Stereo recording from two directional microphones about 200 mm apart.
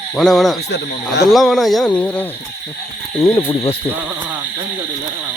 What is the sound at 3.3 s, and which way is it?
Speech, 25° left (ahead or behind).